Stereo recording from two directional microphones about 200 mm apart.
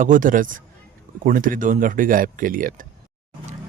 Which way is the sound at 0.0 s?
40° right (ahead or behind).